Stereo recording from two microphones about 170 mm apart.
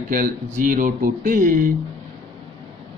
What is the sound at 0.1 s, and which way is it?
A man's voice, 55° right (ahead or behind).